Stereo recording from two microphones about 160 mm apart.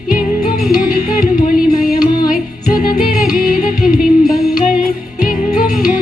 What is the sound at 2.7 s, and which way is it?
Music, 60° left (ahead or behind).